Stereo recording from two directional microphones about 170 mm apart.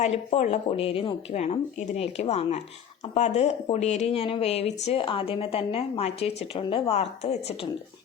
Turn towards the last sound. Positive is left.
turn(degrees=35)  # may be behind; listen again after turning